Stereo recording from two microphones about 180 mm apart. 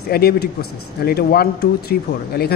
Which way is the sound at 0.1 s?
60° left (ahead or behind).